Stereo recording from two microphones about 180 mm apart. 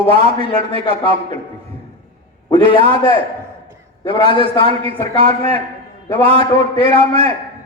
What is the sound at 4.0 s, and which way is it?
A man's voice, 25° left (ahead or behind).